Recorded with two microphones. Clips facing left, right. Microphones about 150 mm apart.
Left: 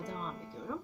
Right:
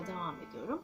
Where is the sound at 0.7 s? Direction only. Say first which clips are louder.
Right 3 dB; 10° right (ahead or behind).